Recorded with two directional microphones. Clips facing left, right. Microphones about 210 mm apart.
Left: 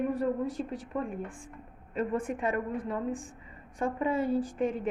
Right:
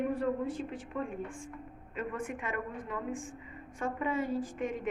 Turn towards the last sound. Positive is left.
turn(degrees=35)  # may be behind; listen again after turning